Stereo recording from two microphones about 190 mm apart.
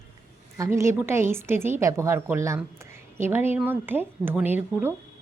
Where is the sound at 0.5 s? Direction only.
15° right (ahead or behind).